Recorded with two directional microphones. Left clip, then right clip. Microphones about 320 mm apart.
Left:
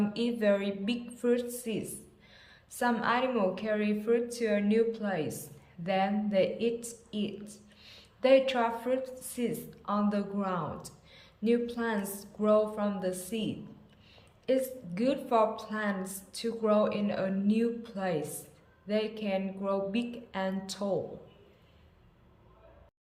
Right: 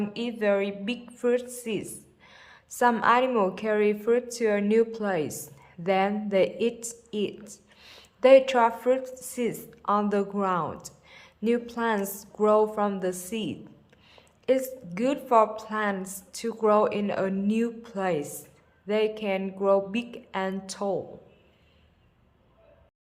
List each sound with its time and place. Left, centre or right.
0.1 s a woman's voice: centre